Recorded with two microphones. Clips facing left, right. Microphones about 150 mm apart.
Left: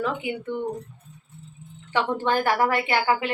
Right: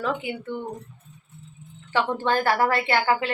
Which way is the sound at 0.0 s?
15° left (ahead or behind).